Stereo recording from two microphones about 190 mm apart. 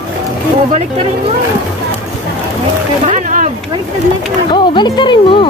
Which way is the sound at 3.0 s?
40° right (ahead or behind).